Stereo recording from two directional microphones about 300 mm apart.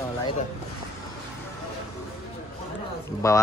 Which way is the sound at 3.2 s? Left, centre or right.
Centre.